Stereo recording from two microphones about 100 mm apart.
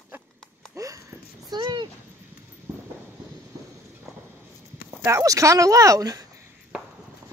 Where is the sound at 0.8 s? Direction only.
35° right (ahead or behind).